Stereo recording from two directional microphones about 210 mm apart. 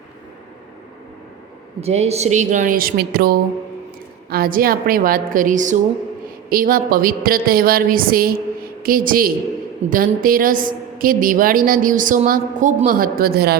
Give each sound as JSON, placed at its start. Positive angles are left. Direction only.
{"t": 1.8, "sound": "a woman's voice", "side_deg": -30}